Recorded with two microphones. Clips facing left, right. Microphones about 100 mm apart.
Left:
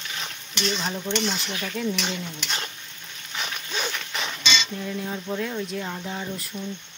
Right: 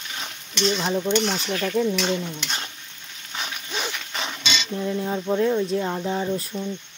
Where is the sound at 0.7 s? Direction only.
15° right (ahead or behind).